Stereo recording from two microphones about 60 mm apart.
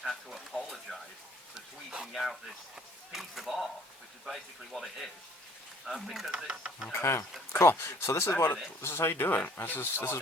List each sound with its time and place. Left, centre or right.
0.0 s speech: centre
1.5 s speech: centre
2.1 s speech: centre
6.3 s speech: centre
6.9 s speech: left